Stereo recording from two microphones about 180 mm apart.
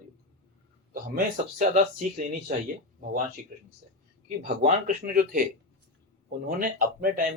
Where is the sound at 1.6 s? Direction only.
45° right (ahead or behind).